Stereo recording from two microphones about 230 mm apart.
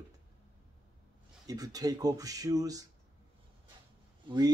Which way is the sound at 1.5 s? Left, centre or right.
Centre.